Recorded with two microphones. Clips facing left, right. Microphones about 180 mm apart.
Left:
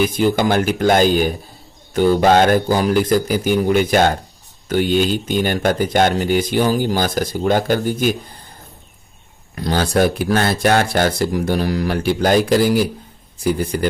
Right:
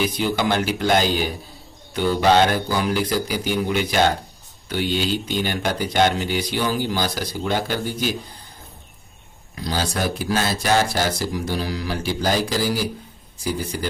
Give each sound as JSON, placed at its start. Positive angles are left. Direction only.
{"t": 0.0, "sound": "speech", "side_deg": 50}
{"t": 9.6, "sound": "speech", "side_deg": 60}